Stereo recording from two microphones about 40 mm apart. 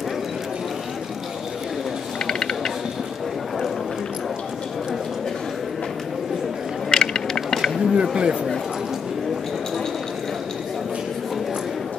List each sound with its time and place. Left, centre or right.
2.2 s mechanisms: centre
6.9 s a sound: centre
7.8 s speech: centre